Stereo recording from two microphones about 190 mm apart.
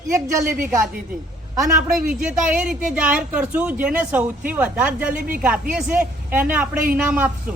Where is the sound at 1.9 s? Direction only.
5° right (ahead or behind).